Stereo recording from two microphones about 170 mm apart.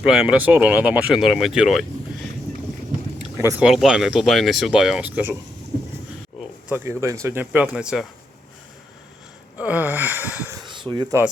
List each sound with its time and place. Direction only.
0.0 s speech: centre (ahead or behind)
3.6 s speech: 5° right (ahead or behind)
6.7 s gasp: 15° right (ahead or behind)
7.7 s speech: centre (ahead or behind)
9.6 s gasp: 10° right (ahead or behind)
10.6 s a sound: 30° right (ahead or behind)
10.9 s gasp: 15° right (ahead or behind)